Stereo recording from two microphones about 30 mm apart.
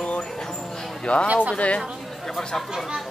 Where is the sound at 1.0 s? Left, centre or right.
Left.